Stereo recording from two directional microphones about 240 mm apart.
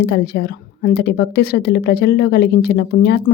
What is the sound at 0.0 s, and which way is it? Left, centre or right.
A woman's voice, left.